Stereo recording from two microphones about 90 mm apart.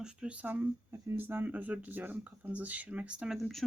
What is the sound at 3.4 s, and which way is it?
Speech, centre (ahead or behind).